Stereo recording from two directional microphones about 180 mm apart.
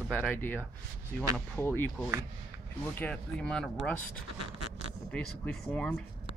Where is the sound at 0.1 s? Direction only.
5° left (ahead or behind).